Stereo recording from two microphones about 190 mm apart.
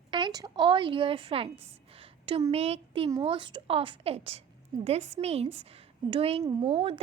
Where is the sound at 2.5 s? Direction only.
30° right (ahead or behind).